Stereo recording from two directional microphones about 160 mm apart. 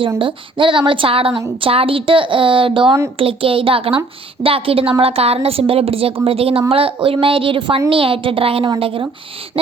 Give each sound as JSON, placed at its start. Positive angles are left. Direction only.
{"t": 0.2, "sound": "a woman's voice", "side_deg": -30}